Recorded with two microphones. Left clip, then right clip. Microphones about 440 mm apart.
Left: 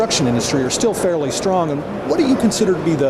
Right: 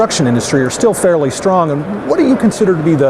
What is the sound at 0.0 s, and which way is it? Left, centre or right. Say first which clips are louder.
A man's voice: right 4 dB; right.